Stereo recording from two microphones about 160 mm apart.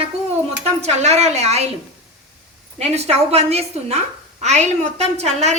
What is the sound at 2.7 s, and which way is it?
A woman's voice, 45° right (ahead or behind).